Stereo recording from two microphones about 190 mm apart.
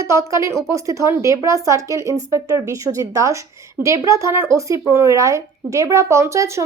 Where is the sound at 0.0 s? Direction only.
15° right (ahead or behind).